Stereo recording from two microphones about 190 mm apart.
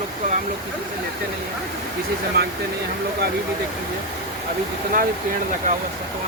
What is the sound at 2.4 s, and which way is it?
Speech, 60° right (ahead or behind).